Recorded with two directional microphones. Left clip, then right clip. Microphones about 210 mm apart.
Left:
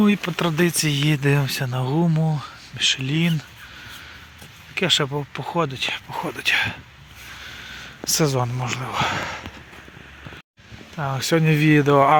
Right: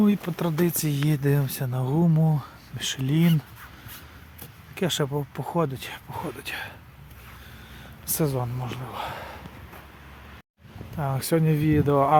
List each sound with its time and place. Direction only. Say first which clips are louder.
0.0 s speech: left 5 dB; 5° left (ahead or behind)
2.7 s speech: left 7 dB; 20° right (ahead or behind)
4.7 s speech: left 7 dB; 10° right (ahead or behind)
5.0 s speech: left 2 dB; 5° left (ahead or behind)
5.3 s speech: left 3 dB; 10° right (ahead or behind)
6.2 s speech: left 16 dB; 5° left (ahead or behind)
7.4 s a sound: left 10 dB; centre (ahead or behind)
8.4 s speech: left 7 dB; 15° left (ahead or behind)
10.9 s speech: left 4 dB; centre (ahead or behind)